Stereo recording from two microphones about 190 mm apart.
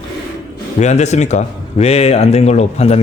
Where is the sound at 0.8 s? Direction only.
35° left (ahead or behind).